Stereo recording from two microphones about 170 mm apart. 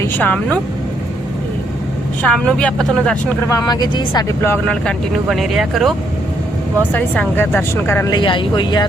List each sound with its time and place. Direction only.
0.0 s speech: 10° left (ahead or behind)
2.2 s speech: 5° left (ahead or behind)
3.5 s speech: 25° left (ahead or behind)
4.4 s speech: 10° left (ahead or behind)
6.9 s a woman's voice: 10° left (ahead or behind)
8.1 s speech: 30° left (ahead or behind)